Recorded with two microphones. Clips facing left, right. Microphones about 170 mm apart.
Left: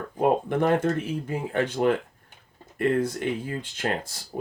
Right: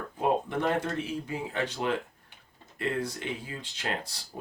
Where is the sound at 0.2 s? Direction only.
50° left (ahead or behind).